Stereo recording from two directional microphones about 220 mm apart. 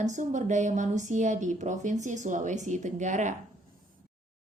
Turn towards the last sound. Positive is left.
turn(degrees=-35)  # may be behind; listen again after turning